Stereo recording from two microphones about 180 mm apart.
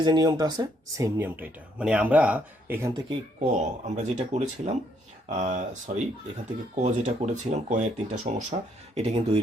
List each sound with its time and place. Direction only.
0.0 s speech: 25° right (ahead or behind)
3.1 s speech: 40° right (ahead or behind)